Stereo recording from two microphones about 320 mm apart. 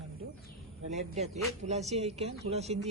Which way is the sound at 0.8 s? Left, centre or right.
Right.